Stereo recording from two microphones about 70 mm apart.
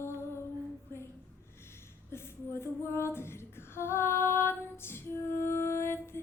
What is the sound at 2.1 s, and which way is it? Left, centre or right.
Female singing, left.